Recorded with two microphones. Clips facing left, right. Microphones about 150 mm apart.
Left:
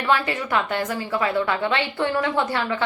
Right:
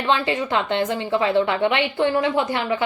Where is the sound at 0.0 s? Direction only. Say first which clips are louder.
Right 1 dB; 25° right (ahead or behind).